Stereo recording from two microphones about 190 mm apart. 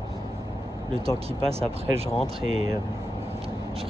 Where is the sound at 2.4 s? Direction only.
90° right.